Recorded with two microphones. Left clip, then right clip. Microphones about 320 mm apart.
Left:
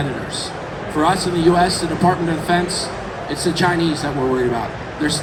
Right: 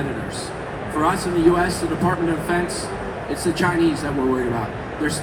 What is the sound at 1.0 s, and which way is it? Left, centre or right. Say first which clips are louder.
Speech: left 2 dB; left.